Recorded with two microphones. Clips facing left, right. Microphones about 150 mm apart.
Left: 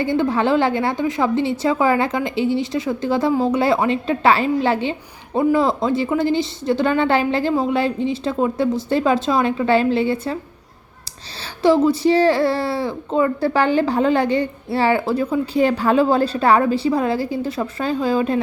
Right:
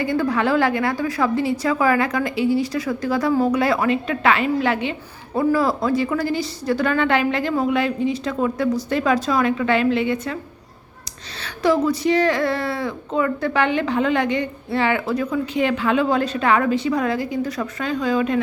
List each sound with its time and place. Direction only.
0.0 s a woman's voice: 25° left (ahead or behind)
11.4 s speech: 30° left (ahead or behind)